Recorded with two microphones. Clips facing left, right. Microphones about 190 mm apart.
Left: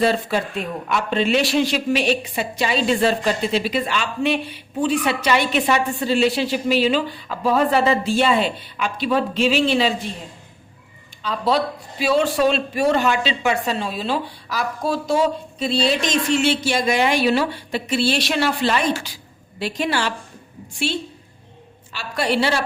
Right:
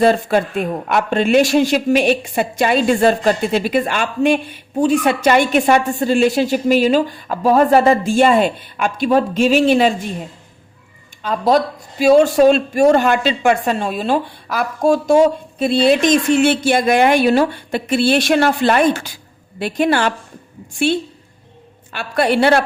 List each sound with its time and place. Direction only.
0.0 s speech: 50° right (ahead or behind)
11.2 s a woman's voice: 50° right (ahead or behind)